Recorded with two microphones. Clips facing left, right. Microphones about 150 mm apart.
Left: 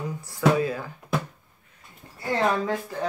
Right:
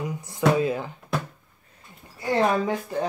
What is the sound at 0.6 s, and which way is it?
Speech, 20° right (ahead or behind).